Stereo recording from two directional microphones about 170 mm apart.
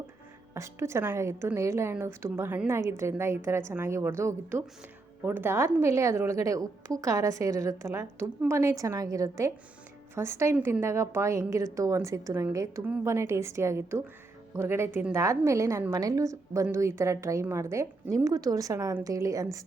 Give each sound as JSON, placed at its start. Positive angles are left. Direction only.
{"t": 0.5, "sound": "a woman's voice", "side_deg": -15}